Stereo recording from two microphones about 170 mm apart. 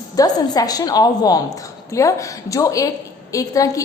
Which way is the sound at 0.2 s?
20° left (ahead or behind).